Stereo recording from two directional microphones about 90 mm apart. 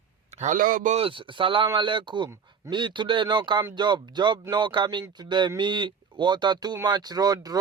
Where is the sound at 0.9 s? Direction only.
85° right.